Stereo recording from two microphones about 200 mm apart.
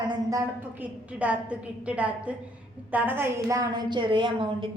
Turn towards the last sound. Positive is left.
turn(degrees=-25)  # may be behind; listen again after turning